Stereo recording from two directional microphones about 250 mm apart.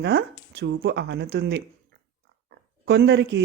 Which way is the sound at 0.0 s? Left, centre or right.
Right.